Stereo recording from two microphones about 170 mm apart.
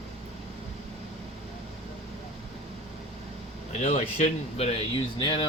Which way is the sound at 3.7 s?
40° left (ahead or behind).